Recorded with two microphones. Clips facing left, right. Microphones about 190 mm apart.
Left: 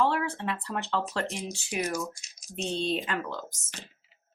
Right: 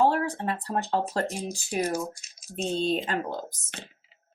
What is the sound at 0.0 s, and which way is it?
Speech, 40° right (ahead or behind).